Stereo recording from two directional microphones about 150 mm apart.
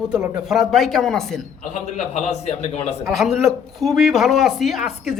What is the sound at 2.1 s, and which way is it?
Speech, 45° left (ahead or behind).